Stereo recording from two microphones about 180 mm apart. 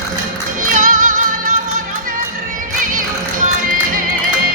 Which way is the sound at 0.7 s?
50° right (ahead or behind).